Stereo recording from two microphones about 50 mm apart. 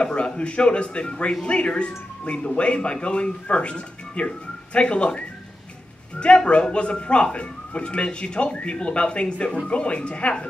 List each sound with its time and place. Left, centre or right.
0.0 s speech: left